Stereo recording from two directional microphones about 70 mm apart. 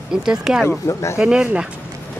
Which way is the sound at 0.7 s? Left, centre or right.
Left.